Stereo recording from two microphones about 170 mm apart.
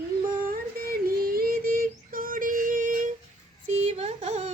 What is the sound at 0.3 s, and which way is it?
Yodeling, 55° right (ahead or behind).